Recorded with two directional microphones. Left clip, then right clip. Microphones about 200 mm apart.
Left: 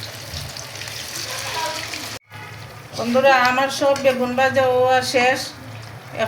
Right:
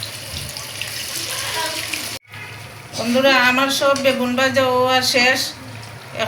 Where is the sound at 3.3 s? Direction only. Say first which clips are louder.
Right 1 dB; 30° left (ahead or behind).